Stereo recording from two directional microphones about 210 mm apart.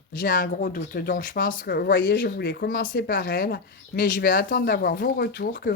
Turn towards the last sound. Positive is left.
turn(degrees=45)  # may be behind; listen again after turning